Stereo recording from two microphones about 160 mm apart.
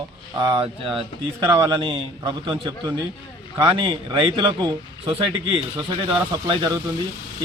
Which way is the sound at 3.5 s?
30° right (ahead or behind).